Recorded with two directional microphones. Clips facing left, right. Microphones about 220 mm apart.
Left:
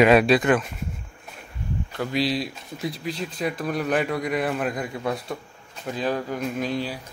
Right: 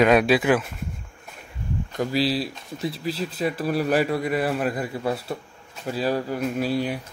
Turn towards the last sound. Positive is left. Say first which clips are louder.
# right 2 dB
turn(degrees=-10)  # may be behind; listen again after turning